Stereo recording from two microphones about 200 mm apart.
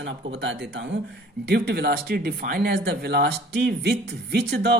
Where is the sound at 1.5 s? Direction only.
55° right (ahead or behind).